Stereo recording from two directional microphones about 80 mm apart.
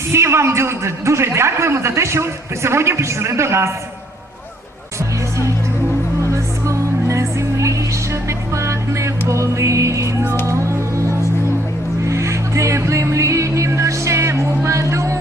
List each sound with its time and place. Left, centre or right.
0.1 s a man's voice: right
6.3 s music: right
12.0 s music: right